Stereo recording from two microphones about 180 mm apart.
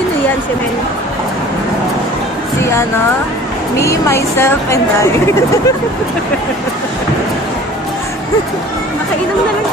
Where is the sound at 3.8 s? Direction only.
15° left (ahead or behind).